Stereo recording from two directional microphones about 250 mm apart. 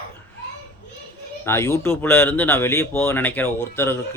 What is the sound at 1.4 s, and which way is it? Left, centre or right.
Speech, centre.